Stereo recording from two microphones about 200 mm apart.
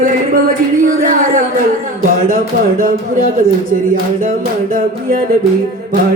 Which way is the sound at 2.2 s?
45° right (ahead or behind).